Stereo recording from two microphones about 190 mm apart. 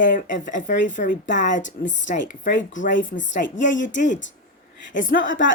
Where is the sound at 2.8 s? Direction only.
45° left (ahead or behind).